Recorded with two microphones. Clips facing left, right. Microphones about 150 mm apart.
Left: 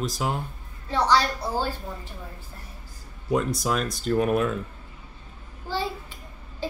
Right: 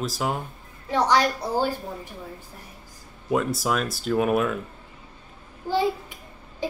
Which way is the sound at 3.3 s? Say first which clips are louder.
Right 1 dB; centre (ahead or behind).